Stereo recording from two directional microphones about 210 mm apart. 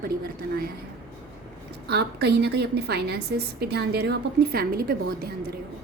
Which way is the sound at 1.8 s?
50° right (ahead or behind).